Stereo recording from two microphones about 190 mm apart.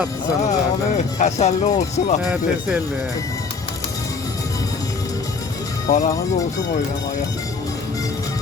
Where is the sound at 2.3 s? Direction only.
5° right (ahead or behind).